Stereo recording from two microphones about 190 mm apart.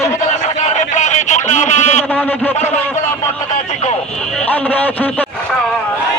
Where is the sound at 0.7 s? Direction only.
40° left (ahead or behind).